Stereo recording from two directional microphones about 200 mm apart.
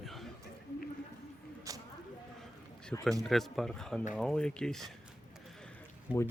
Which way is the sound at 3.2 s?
Centre (ahead or behind).